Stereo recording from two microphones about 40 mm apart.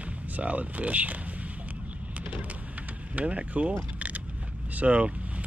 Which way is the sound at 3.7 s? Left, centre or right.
Right.